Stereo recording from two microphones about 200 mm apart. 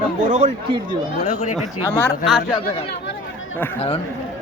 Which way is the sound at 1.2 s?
40° left (ahead or behind).